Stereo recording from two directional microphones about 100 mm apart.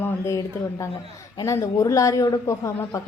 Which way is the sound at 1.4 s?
35° left (ahead or behind).